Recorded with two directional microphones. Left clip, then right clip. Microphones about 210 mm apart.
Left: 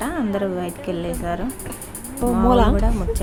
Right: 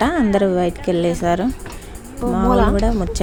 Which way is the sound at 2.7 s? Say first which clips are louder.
Right 4 dB; 20° right (ahead or behind).